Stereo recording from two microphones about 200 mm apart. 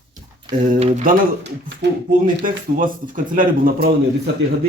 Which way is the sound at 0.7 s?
30° right (ahead or behind).